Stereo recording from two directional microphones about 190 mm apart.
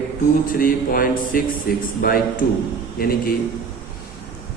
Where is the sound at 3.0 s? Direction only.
50° left (ahead or behind).